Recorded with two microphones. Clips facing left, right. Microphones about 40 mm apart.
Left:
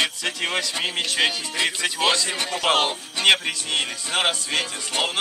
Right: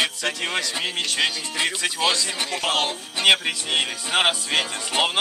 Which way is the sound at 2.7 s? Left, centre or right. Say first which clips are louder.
Left 4 dB; left.